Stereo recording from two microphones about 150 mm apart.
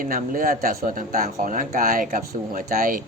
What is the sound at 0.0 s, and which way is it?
Speech, 65° right (ahead or behind).